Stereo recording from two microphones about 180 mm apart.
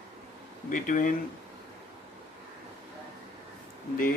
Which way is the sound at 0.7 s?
45° left (ahead or behind).